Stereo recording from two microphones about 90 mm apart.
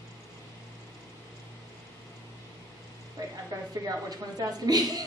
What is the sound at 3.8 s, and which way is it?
A woman's voice, 45° right (ahead or behind).